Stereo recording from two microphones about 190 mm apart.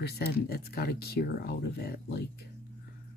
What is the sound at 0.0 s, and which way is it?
Speech, 55° left (ahead or behind).